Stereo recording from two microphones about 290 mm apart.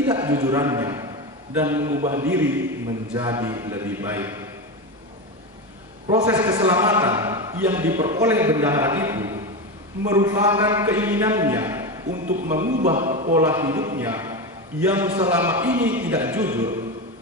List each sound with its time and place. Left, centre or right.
0.0 s a man's voice: centre
6.0 s a man's voice: centre
12.1 s speech: right
13.5 s a man's voice: centre